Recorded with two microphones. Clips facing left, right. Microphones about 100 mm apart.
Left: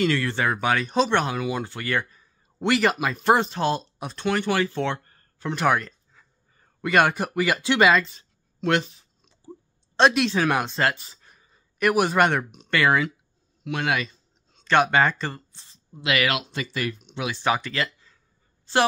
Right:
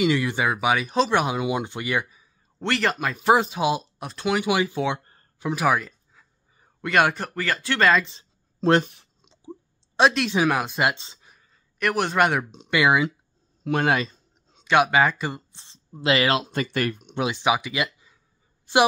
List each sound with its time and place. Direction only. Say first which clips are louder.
0.0 s speech: right 1 dB; 15° right (ahead or behind)
2.6 s speech: left 3 dB; 5° left (ahead or behind)
8.0 s a sound: left 1 dB; 25° right (ahead or behind)
8.8 s speech: right 4 dB; 65° right (ahead or behind)
9.2 s a sound: right 3 dB; 20° right (ahead or behind)
9.9 s speech: even; centre (ahead or behind)
10.8 s speech: right 1 dB; 20° right (ahead or behind)
11.8 s speech: left 2 dB; 5° left (ahead or behind); by 13.1 s 15° right (ahead or behind)
13.7 s speech: right 4 dB; 40° right (ahead or behind)
14.6 s speech: right 1 dB; 5° right (ahead or behind)
15.5 s speech: right 3 dB; 30° right (ahead or behind); by 17.2 s 50° right (ahead or behind)
17.3 s speech: even; 10° right (ahead or behind)